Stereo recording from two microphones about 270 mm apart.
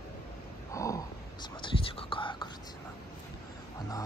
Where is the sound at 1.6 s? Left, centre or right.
Centre.